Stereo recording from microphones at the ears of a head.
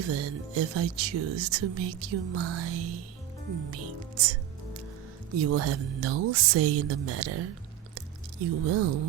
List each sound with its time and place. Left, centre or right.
0.0 s speech: right
5.3 s speech: right
7.9 s squish: right